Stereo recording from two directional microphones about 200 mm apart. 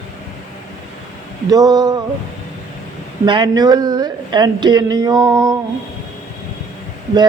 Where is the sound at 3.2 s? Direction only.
20° right (ahead or behind).